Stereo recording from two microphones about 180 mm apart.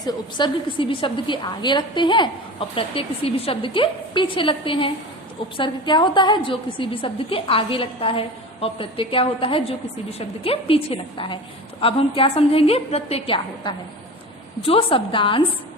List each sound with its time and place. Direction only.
0.0 s a woman's voice: 25° left (ahead or behind)